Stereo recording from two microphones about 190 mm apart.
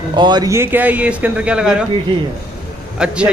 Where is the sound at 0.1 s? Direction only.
25° right (ahead or behind); by 1.9 s 5° right (ahead or behind).